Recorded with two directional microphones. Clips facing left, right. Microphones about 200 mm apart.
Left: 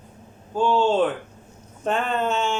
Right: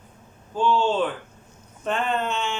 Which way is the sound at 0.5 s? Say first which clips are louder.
Left 2 dB; 45° left (ahead or behind).